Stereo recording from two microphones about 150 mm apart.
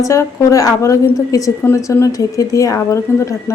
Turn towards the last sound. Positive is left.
turn(degrees=20)  # may be behind; listen again after turning